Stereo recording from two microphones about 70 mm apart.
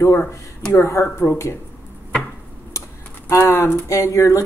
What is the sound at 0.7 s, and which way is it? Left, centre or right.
Speech, left.